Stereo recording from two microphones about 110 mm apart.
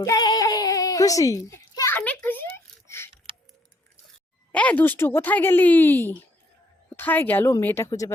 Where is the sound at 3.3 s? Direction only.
55° right (ahead or behind).